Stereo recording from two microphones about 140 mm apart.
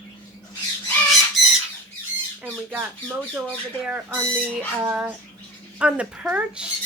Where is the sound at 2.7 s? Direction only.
15° right (ahead or behind).